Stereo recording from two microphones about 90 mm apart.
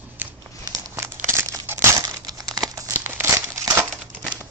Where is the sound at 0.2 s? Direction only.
20° right (ahead or behind).